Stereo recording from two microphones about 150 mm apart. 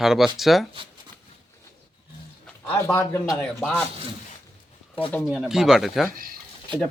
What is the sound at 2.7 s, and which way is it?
Speech, 20° left (ahead or behind).